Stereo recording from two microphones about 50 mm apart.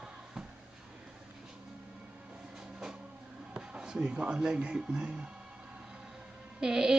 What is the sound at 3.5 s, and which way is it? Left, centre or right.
Speech, centre.